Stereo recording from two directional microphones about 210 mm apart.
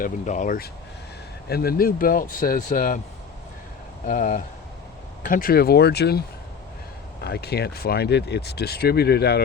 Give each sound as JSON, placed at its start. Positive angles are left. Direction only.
{"t": 0.0, "sound": "speech", "side_deg": 40}
{"t": 4.0, "sound": "speech", "side_deg": 40}